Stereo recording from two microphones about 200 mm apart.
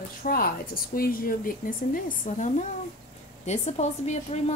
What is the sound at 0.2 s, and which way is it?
A woman's voice, 45° left (ahead or behind).